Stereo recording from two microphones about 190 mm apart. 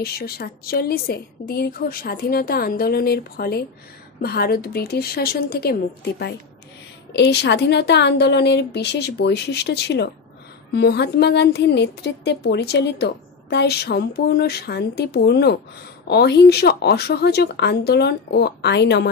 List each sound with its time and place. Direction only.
0.0 s a woman's voice: 55° left (ahead or behind)